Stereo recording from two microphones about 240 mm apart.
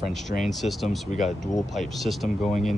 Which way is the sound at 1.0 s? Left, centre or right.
Left.